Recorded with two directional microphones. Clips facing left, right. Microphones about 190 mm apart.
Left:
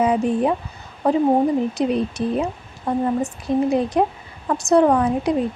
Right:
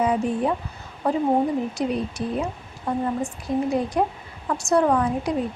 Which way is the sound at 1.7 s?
20° left (ahead or behind).